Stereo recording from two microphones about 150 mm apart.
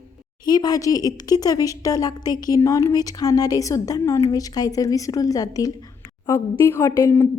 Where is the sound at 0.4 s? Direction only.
25° left (ahead or behind).